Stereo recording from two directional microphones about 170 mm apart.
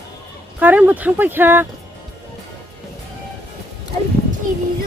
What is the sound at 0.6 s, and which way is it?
Speech, 10° right (ahead or behind).